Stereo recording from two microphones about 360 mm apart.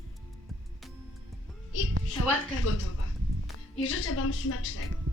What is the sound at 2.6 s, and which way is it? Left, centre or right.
A woman's voice, left.